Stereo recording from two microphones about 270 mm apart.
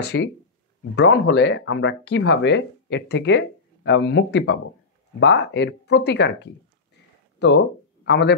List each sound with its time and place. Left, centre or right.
0.0 s speech: left